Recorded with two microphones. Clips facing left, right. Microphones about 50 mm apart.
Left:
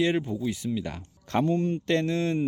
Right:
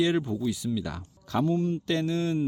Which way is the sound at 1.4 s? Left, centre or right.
Left.